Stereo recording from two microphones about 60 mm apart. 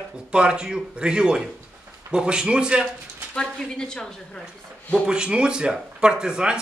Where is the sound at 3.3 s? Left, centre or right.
Centre.